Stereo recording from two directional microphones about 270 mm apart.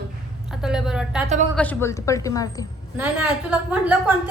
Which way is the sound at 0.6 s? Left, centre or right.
Centre.